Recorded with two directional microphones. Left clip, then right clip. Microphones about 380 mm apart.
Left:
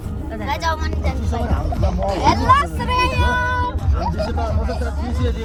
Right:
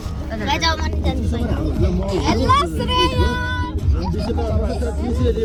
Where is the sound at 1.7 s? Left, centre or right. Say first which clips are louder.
Left 3 dB; centre.